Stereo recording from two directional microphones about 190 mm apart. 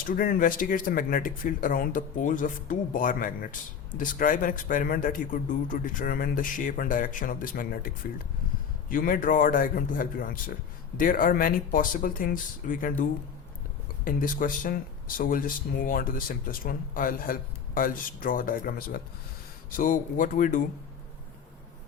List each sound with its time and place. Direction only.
0.1 s a man's voice: 45° left (ahead or behind)
8.9 s a man's voice: 45° left (ahead or behind)